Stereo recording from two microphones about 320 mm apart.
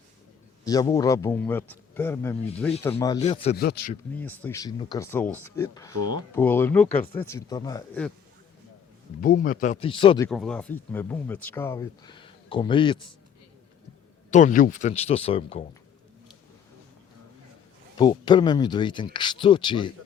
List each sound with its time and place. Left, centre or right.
0.6 s speech: centre
3.5 s speech: left
4.1 s speech: centre
5.9 s speech: right
6.3 s speech: centre
9.2 s speech: left
10.2 s speech: centre
14.3 s speech: left
17.9 s speech: centre